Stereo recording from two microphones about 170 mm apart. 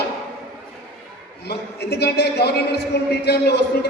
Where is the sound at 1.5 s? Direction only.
75° left (ahead or behind).